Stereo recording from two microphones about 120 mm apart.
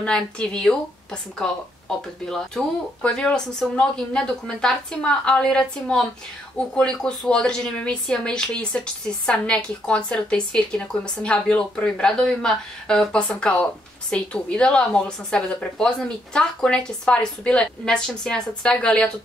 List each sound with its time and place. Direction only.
0.0 s speech: 5° left (ahead or behind)